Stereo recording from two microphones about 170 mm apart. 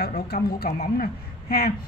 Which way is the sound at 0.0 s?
65° left (ahead or behind).